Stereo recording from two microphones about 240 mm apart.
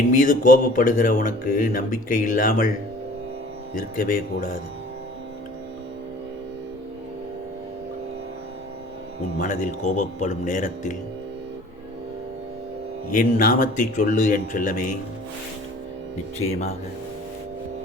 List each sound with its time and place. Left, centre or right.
0.1 s speech: left
3.8 s speech: left
9.4 s speech: left
13.1 s speech: left
16.5 s speech: left